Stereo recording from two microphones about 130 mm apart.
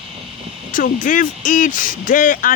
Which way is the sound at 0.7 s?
90° left.